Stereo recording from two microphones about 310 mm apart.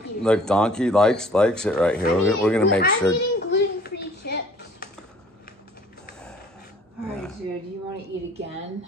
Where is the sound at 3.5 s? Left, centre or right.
Left.